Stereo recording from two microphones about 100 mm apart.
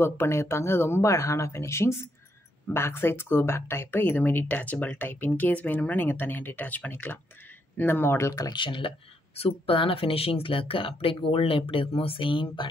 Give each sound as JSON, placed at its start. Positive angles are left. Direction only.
{"t": 0.0, "sound": "speech", "side_deg": 25}
{"t": 8.5, "sound": "speech", "side_deg": 55}